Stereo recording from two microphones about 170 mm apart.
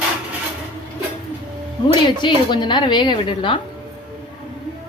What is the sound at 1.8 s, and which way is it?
A woman's voice, 25° left (ahead or behind).